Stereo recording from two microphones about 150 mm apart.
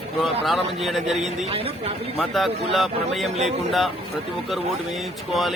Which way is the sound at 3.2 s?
45° right (ahead or behind).